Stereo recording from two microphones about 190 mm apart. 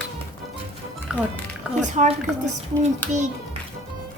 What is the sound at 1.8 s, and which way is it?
Speech, 40° right (ahead or behind).